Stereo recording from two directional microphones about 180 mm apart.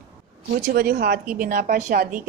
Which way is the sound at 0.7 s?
55° right (ahead or behind).